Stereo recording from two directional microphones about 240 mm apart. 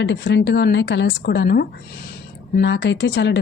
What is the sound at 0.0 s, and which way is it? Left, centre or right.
A woman's voice, left.